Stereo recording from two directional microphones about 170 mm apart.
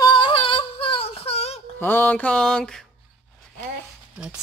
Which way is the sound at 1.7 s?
10° left (ahead or behind).